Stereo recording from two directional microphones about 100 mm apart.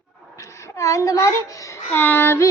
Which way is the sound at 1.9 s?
20° left (ahead or behind).